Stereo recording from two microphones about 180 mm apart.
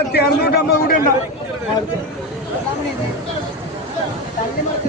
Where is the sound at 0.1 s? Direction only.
65° left (ahead or behind).